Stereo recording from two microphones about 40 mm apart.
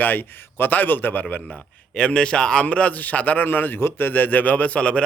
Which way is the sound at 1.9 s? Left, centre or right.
Left.